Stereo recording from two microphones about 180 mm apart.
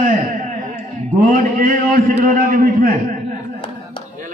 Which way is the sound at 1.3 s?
50° right (ahead or behind).